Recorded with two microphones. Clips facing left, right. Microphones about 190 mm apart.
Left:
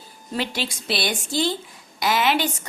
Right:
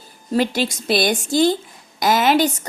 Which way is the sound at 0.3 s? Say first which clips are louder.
Right 8 dB; 45° right (ahead or behind).